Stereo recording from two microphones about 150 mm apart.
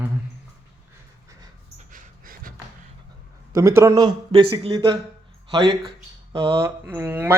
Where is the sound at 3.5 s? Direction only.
20° right (ahead or behind).